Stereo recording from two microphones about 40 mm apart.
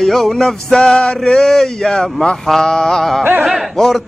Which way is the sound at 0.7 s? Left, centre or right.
Left.